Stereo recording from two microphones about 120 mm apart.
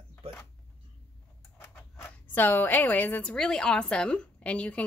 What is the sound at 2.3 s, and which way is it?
A woman's voice, 15° left (ahead or behind).